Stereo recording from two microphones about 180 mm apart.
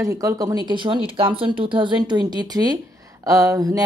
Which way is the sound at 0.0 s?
15° right (ahead or behind).